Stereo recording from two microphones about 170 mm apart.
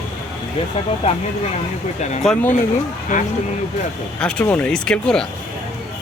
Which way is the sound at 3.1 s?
45° left (ahead or behind).